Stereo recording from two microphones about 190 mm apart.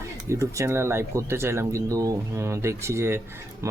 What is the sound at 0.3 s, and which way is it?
Speech, 15° right (ahead or behind).